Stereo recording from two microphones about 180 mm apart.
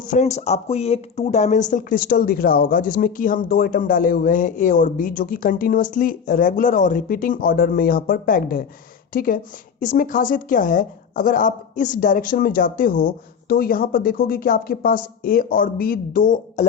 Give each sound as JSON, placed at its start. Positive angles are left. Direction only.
{"t": 0.0, "sound": "speech", "side_deg": 40}